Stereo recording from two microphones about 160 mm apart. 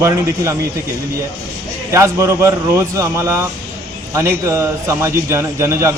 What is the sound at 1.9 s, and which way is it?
A man's voice, 20° right (ahead or behind).